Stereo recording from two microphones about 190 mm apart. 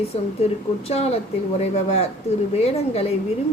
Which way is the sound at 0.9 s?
35° left (ahead or behind).